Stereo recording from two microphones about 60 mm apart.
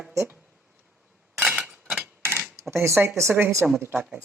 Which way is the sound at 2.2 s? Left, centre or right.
Right.